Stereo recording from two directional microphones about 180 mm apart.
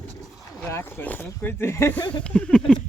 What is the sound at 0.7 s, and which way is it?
Speech, 10° left (ahead or behind).